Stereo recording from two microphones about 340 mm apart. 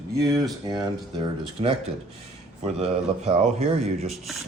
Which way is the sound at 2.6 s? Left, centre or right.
Centre.